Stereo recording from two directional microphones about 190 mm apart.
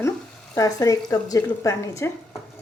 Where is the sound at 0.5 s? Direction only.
15° left (ahead or behind).